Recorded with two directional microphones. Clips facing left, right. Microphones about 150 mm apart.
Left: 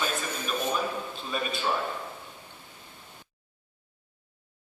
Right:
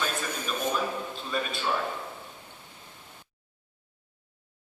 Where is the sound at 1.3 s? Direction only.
5° left (ahead or behind).